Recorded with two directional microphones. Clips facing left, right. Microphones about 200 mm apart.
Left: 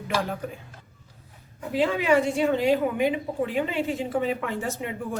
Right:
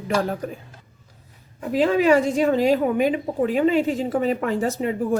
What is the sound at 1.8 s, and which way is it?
A woman's voice, 40° right (ahead or behind).